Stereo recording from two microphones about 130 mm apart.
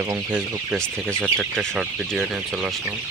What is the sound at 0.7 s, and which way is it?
Speech, 5° left (ahead or behind).